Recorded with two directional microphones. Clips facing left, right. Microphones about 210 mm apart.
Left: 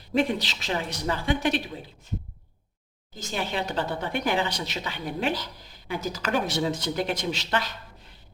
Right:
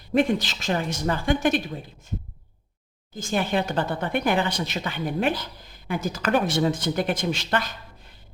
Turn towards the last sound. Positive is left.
turn(degrees=-50)  # may be behind; listen again after turning